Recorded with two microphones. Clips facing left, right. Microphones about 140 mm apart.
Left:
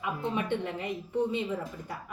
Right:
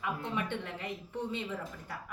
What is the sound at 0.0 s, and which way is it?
Speech, 20° left (ahead or behind).